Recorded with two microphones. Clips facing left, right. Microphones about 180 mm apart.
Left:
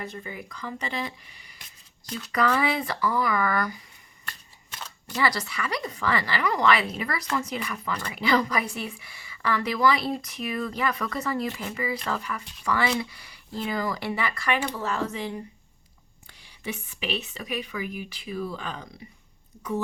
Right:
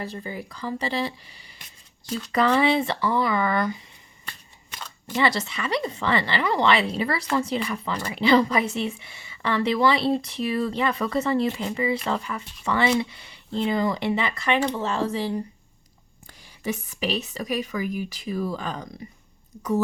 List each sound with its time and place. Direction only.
0.0 s a woman's voice: 30° right (ahead or behind)
5.1 s a woman's voice: 25° right (ahead or behind)
16.4 s a woman's voice: 40° right (ahead or behind)